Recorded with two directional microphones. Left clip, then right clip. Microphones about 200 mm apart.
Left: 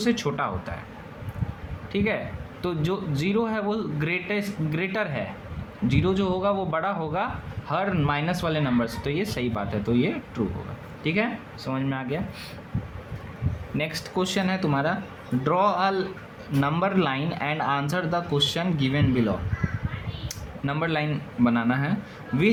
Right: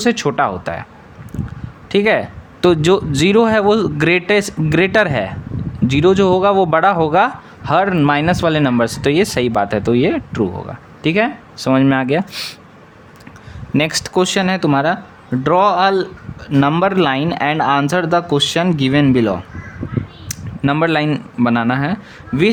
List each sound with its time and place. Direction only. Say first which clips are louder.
0.0 s speech: right 11 dB; 50° right (ahead or behind)
1.9 s speech: right 13 dB; 55° right (ahead or behind)
13.7 s speech: right 12 dB; 55° right (ahead or behind)